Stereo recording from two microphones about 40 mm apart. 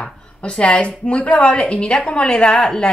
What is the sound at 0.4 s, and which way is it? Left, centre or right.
A woman's voice, left.